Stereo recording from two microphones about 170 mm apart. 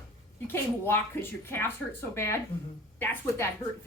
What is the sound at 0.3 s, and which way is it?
A woman's voice, 15° left (ahead or behind).